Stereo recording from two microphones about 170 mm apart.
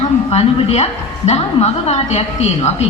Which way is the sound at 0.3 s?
35° left (ahead or behind).